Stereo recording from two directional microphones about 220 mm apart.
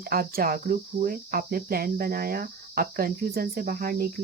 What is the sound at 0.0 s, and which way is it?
Speech, 45° right (ahead or behind).